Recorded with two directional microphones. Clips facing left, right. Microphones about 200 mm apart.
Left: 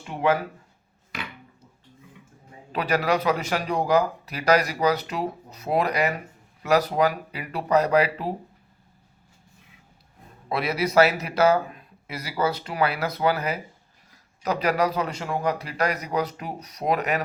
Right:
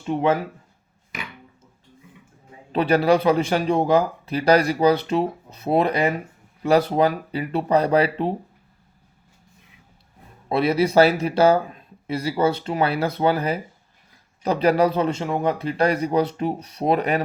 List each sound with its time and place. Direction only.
0.0 s a man's voice: 25° right (ahead or behind)
2.7 s a man's voice: 30° right (ahead or behind)
10.5 s a man's voice: 30° right (ahead or behind)